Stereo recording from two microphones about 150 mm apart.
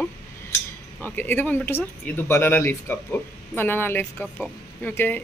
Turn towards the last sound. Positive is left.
turn(degrees=15)  # may be behind; listen again after turning